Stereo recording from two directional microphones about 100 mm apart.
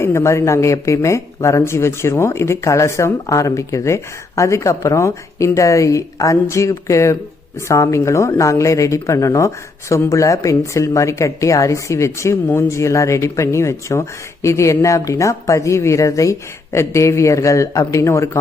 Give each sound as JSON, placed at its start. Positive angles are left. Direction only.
{"t": 0.0, "sound": "speech", "side_deg": 30}